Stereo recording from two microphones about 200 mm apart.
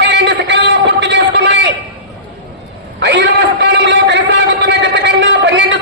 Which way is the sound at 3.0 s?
60° right (ahead or behind).